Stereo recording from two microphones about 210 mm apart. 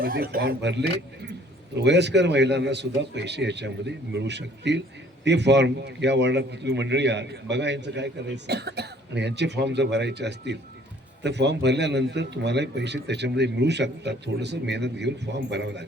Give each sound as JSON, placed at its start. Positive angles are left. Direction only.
{"t": 0.0, "sound": "a man's voice", "side_deg": -45}